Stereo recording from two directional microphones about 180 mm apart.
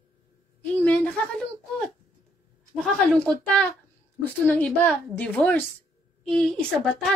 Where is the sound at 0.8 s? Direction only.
5° left (ahead or behind).